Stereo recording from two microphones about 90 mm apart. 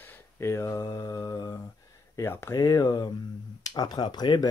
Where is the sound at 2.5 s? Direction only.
45° left (ahead or behind).